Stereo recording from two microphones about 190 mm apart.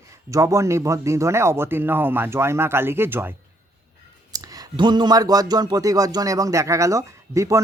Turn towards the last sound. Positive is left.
turn(degrees=-15)  # may be behind; listen again after turning